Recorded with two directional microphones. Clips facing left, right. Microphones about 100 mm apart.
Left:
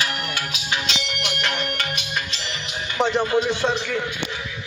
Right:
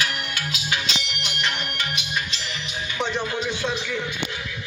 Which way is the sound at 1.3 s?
55° left (ahead or behind).